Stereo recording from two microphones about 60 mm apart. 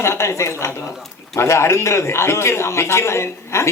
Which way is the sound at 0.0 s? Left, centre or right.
Left.